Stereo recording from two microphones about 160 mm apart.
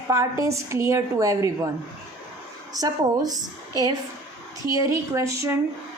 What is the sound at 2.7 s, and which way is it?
A woman's voice, 25° right (ahead or behind).